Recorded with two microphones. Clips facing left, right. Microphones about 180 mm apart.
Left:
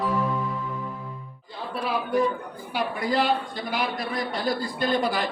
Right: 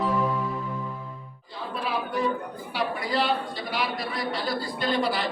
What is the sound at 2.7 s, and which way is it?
A man's voice, 50° left (ahead or behind).